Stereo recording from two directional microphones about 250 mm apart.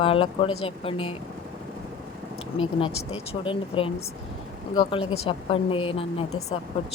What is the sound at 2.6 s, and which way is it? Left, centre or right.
Speech, left.